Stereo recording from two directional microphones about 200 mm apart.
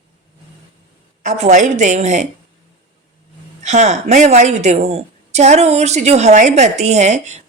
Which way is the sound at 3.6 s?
35° right (ahead or behind).